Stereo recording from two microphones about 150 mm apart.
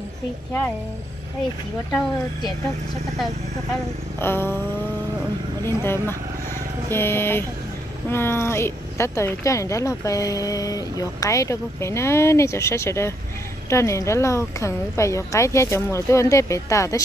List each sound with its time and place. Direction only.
4.2 s speech: 15° left (ahead or behind)
5.8 s speech: 15° left (ahead or behind)